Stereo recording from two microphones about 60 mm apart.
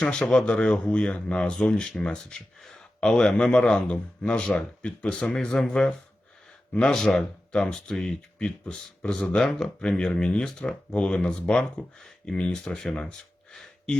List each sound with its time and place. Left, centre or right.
0.0 s speech: centre
6.9 s speech: centre